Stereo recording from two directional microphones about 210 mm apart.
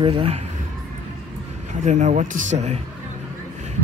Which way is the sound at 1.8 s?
35° right (ahead or behind).